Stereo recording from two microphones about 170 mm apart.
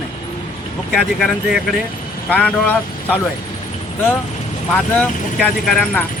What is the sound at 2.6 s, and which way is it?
Speech, 10° left (ahead or behind).